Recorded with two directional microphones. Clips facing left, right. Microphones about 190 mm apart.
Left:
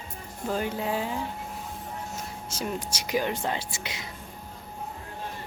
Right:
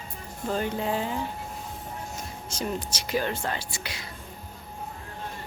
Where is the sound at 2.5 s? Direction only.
5° left (ahead or behind).